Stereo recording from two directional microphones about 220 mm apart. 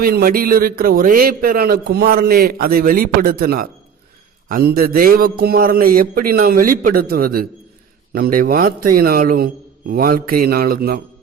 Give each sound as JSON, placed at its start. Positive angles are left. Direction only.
{"t": 0.0, "sound": "a man's voice", "side_deg": -45}